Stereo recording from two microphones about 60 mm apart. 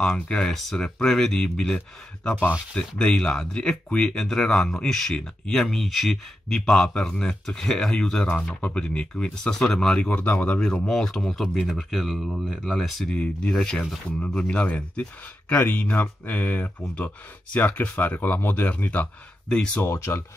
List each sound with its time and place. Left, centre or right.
0.0 s speech: centre
3.0 s speech: centre
10.0 s speech: left; by 13.1 s centre
13.1 s speech: centre
19.5 s speech: centre
19.9 s speech: left